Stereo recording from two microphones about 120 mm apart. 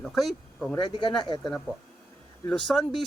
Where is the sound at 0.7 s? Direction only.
40° left (ahead or behind).